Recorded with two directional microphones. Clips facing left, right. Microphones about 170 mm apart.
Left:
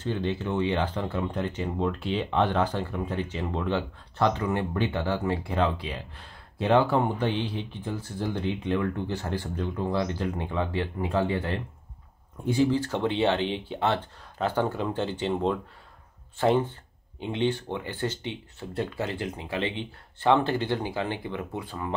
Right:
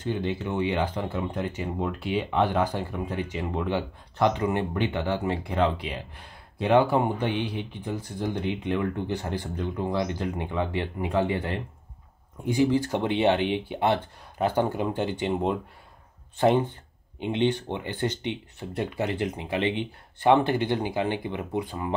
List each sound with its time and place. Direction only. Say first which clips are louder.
0.0 s speech: even; 15° right (ahead or behind)